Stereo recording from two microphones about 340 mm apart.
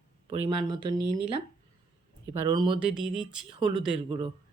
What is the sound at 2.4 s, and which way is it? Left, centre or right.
Speech, centre.